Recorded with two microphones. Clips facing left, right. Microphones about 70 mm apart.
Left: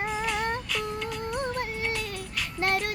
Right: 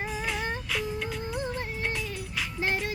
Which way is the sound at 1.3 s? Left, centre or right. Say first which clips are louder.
Left 3 dB; left.